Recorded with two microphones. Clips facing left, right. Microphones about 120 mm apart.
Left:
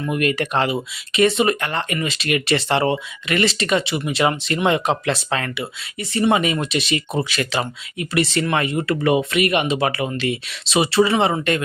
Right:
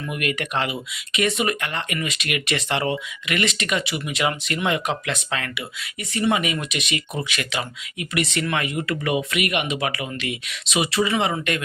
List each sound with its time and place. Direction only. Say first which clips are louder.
0.0 s speech: left 6 dB; 35° left (ahead or behind)